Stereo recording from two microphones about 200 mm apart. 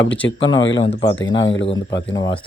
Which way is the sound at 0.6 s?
70° left (ahead or behind).